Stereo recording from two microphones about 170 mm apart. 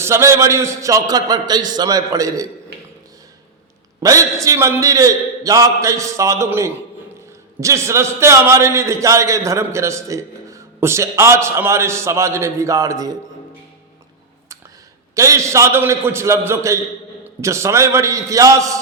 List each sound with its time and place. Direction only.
0.0 s a man's voice: 15° right (ahead or behind)
4.0 s a man's voice: 20° right (ahead or behind)
15.1 s a man's voice: 20° right (ahead or behind)